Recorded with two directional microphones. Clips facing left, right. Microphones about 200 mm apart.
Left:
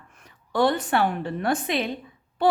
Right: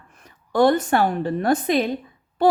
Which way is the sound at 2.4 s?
40° right (ahead or behind).